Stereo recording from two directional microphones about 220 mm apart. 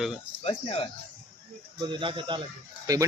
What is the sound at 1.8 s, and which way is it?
Speech, 20° right (ahead or behind).